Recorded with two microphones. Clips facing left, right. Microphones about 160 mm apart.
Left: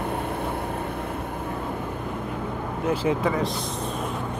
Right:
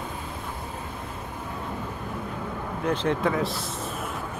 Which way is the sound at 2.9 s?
5° left (ahead or behind).